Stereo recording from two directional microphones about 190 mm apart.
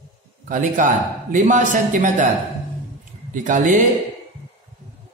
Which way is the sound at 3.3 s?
45° right (ahead or behind).